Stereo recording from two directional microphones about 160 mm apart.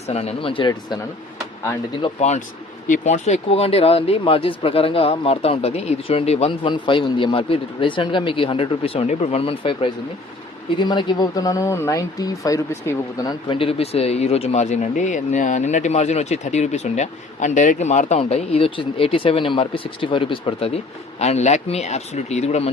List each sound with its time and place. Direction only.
0.1 s speech: 40° left (ahead or behind)
2.8 s speech: 50° left (ahead or behind); by 13.3 s 20° left (ahead or behind)
13.5 s speech: 35° left (ahead or behind)